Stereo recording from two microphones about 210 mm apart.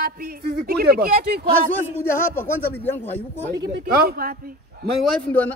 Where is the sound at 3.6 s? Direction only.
50° right (ahead or behind).